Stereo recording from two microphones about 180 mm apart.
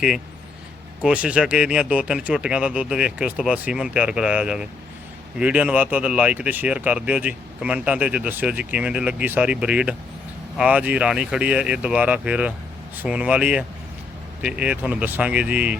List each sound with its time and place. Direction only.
1.0 s speech: 5° right (ahead or behind)